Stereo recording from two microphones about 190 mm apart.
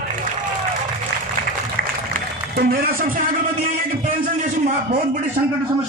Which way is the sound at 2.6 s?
55° right (ahead or behind).